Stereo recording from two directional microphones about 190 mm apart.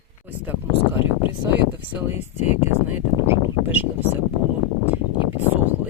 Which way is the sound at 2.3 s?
35° left (ahead or behind).